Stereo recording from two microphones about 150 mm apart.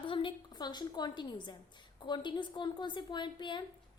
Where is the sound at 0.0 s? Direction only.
35° left (ahead or behind).